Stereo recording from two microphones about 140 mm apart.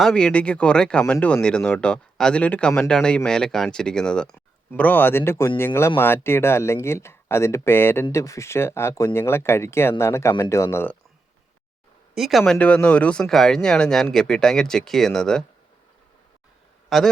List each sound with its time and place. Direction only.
0.0 s speech: 5° left (ahead or behind)
12.1 s speech: centre (ahead or behind)
16.9 s speech: centre (ahead or behind)